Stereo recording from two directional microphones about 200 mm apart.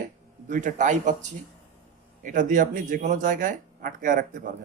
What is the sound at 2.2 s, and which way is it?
Speech, 40° right (ahead or behind).